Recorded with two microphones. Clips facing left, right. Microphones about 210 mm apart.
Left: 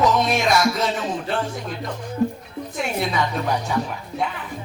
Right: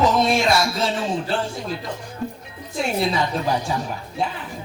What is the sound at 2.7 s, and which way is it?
Music, 30° right (ahead or behind).